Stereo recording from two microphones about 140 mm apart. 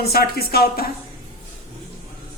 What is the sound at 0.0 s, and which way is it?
Speech, 90° left.